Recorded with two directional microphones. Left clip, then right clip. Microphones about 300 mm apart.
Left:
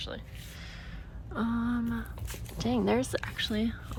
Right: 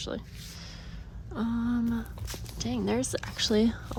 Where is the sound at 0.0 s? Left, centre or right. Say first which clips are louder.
Right 3 dB; centre.